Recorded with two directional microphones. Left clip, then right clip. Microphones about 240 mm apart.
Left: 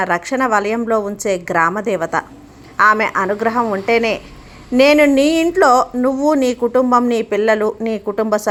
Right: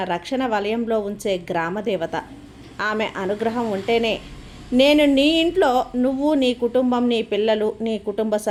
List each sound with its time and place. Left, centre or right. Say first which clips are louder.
0.0 s a woman's voice: left 7 dB; centre
3.8 s speech: left 3 dB; left
4.8 s a woman's voice: left 5 dB; centre